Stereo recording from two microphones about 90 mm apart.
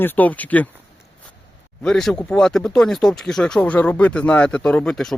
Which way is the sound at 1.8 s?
5° left (ahead or behind).